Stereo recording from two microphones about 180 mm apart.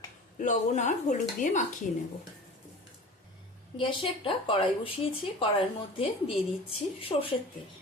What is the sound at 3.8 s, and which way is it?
A woman's voice, 30° left (ahead or behind).